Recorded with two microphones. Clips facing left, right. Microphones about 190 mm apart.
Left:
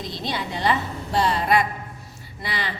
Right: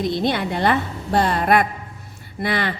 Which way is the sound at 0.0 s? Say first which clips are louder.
Right 8 dB; 60° right (ahead or behind).